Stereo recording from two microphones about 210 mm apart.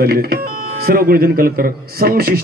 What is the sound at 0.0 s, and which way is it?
Speech, 45° right (ahead or behind).